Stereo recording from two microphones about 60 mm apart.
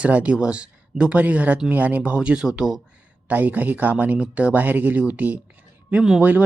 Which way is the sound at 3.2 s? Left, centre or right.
Right.